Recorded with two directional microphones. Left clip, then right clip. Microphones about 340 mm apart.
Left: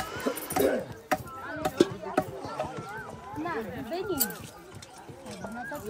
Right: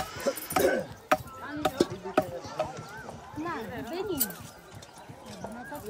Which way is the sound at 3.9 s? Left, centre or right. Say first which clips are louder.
Left 2 dB; centre.